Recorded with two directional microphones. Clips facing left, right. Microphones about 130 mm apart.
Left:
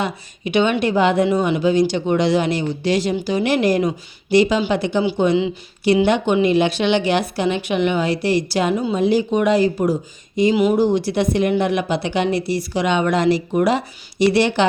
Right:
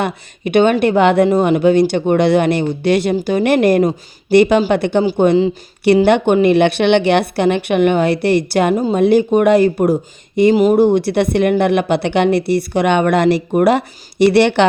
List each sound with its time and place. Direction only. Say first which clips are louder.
0.0 s speech: right 4 dB; 55° right (ahead or behind)
10.5 s speech: right 5 dB; 45° right (ahead or behind); by 14.7 s 65° right (ahead or behind)